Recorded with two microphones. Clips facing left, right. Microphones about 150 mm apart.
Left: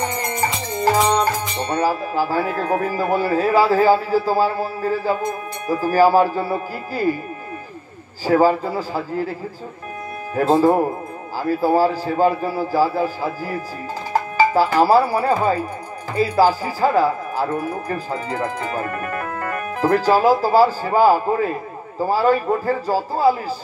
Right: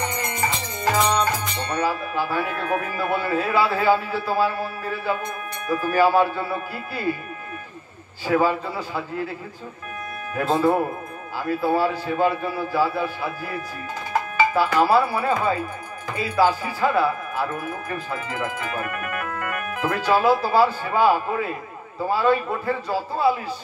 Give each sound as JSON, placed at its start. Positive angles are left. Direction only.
{"t": 0.0, "sound": "music", "side_deg": 40}
{"t": 0.7, "sound": "speech", "side_deg": 30}
{"t": 8.3, "sound": "speech", "side_deg": 35}
{"t": 10.3, "sound": "speech", "side_deg": 30}